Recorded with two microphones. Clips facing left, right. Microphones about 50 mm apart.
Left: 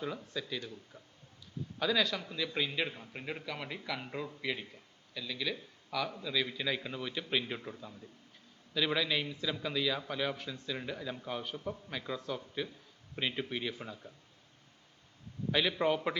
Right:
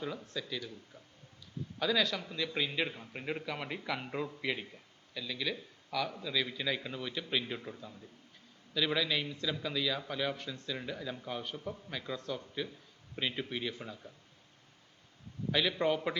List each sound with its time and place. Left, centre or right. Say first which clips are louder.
0.0 s a man's voice: left 1 dB; centre
1.8 s a man's voice: even; centre
15.5 s a man's voice: even; centre